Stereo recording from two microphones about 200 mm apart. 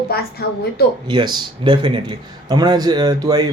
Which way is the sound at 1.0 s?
20° right (ahead or behind).